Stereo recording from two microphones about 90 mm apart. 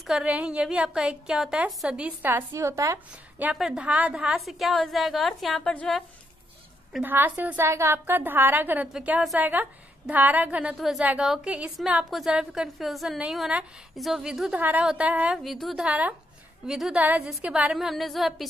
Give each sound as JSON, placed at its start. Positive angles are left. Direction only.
{"t": 0.2, "sound": "a woman's voice", "side_deg": -15}
{"t": 2.3, "sound": "a woman's voice", "side_deg": -30}
{"t": 3.5, "sound": "a woman's voice", "side_deg": -5}
{"t": 3.8, "sound": "a woman's voice", "side_deg": -15}
{"t": 4.4, "sound": "a woman's voice", "side_deg": 0}
{"t": 7.0, "sound": "a woman's voice", "side_deg": -20}
{"t": 7.6, "sound": "a woman's voice", "side_deg": -30}
{"t": 10.8, "sound": "a woman's voice", "side_deg": 0}
{"t": 14.6, "sound": "a woman's voice", "side_deg": -20}
{"t": 15.3, "sound": "a woman's voice", "side_deg": 0}
{"t": 15.8, "sound": "a woman's voice", "side_deg": -15}
{"t": 16.6, "sound": "a woman's voice", "side_deg": -5}
{"t": 16.9, "sound": "a woman's voice", "side_deg": -15}
{"t": 17.7, "sound": "a woman's voice", "side_deg": 0}